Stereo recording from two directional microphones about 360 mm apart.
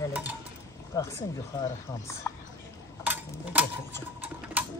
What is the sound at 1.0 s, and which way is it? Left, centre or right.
Speech, centre.